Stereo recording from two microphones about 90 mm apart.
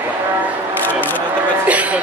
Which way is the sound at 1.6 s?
15° right (ahead or behind).